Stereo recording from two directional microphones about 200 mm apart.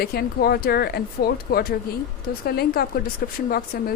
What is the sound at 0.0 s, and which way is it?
Speech, 50° left (ahead or behind).